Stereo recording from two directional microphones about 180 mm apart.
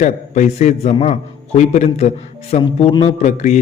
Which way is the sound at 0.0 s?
40° left (ahead or behind).